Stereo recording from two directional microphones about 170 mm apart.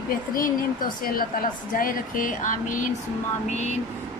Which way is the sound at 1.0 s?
60° left (ahead or behind).